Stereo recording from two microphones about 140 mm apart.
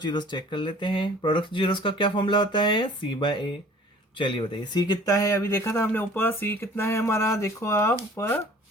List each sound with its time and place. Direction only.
0.0 s speech: 30° left (ahead or behind); by 8.4 s 15° left (ahead or behind)